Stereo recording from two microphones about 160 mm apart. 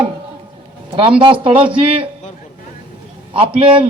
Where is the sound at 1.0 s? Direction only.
35° right (ahead or behind).